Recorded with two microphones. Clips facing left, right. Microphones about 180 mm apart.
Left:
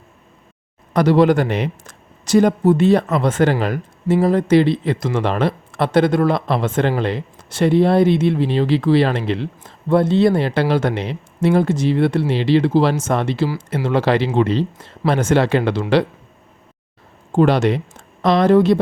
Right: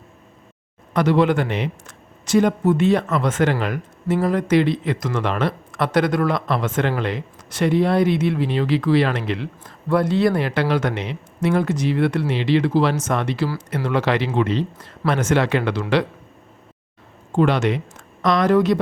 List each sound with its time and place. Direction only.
0.9 s speech: 35° left (ahead or behind)
17.3 s speech: 35° left (ahead or behind)